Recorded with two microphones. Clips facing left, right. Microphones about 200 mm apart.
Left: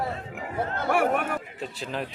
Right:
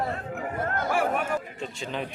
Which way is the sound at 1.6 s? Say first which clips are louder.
Even; centre (ahead or behind).